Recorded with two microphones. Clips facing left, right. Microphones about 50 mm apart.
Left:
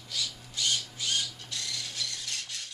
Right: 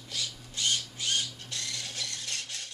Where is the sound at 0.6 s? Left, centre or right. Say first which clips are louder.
Even; centre.